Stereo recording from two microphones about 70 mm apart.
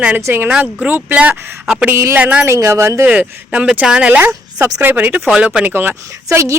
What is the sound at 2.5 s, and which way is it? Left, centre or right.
Speech, right.